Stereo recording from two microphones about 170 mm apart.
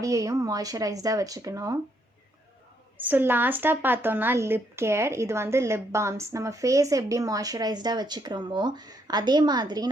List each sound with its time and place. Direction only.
0.0 s speech: 20° right (ahead or behind)
3.0 s speech: 10° right (ahead or behind)